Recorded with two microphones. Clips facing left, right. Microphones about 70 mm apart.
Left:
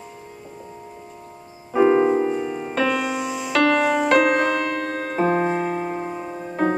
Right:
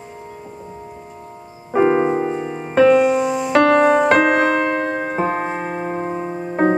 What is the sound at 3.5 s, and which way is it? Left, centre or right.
Music, right.